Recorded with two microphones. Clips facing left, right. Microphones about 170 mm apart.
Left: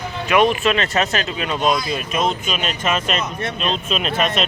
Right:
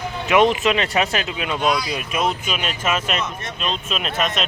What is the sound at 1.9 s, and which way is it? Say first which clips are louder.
Speech: left 2 dB; 10° right (ahead or behind).